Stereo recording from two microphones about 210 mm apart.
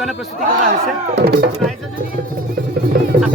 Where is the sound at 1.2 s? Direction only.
50° right (ahead or behind).